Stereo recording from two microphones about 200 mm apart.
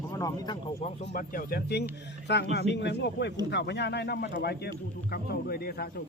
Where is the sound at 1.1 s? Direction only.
45° left (ahead or behind).